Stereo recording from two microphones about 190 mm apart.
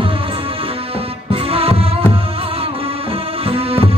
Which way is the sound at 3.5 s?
30° right (ahead or behind).